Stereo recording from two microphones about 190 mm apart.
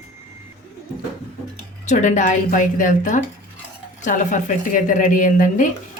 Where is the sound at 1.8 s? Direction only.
40° left (ahead or behind).